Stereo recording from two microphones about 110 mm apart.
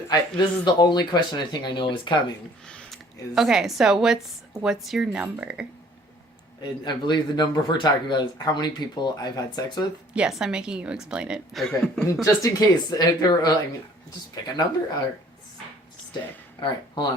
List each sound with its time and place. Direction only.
0.1 s speech: 40° left (ahead or behind)
2.6 s a sound: 10° left (ahead or behind)
3.3 s a woman's voice: 5° right (ahead or behind)
6.6 s speech: 40° left (ahead or behind)
10.2 s a woman's voice: 5° right (ahead or behind)
12.2 s speech: 35° left (ahead or behind)
16.6 s speech: 45° left (ahead or behind)